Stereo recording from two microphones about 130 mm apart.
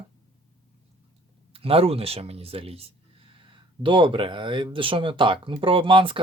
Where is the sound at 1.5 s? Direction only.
45° right (ahead or behind).